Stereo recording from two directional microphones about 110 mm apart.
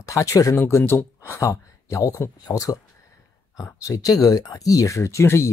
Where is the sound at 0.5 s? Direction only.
20° left (ahead or behind).